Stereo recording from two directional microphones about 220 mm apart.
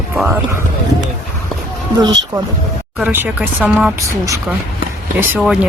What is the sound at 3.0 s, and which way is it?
Speech, 10° right (ahead or behind).